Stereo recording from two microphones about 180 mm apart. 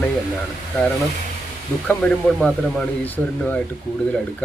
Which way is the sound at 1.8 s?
5° left (ahead or behind).